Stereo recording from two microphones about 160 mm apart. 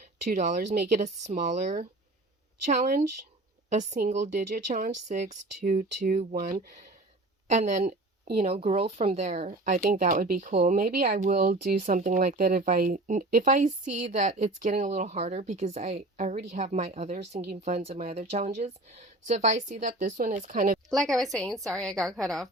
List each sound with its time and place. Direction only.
0.9 s speech: 45° right (ahead or behind)
6.3 s speech: 70° right (ahead or behind)
7.4 s speech: 50° right (ahead or behind)
9.5 s speech: 55° right (ahead or behind)
20.9 s a woman's voice: centre (ahead or behind)